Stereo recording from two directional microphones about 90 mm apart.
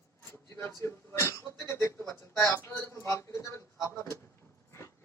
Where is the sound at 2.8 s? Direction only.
30° left (ahead or behind).